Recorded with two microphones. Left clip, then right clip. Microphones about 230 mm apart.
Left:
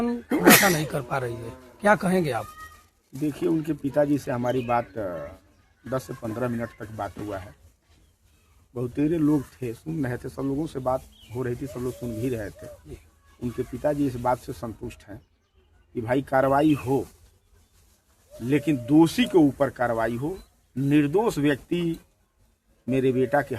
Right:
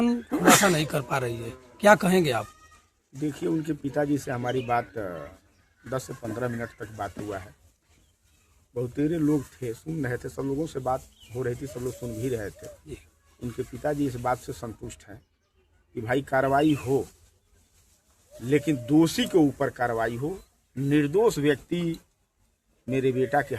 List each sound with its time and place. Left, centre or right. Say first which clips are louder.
0.0 s speech: right 2 dB; right
0.3 s speech: left 3 dB; left
0.6 s speech: left 1 dB; right
3.2 s speech: left 3 dB; centre
8.7 s speech: left 2 dB; centre
18.4 s speech: even; centre